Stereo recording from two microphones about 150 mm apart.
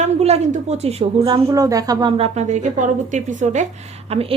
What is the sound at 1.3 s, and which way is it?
A woman's voice, 25° right (ahead or behind).